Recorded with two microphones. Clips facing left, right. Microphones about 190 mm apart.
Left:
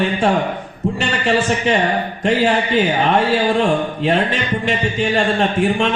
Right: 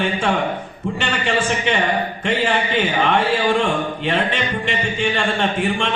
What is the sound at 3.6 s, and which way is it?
Speech, 40° left (ahead or behind).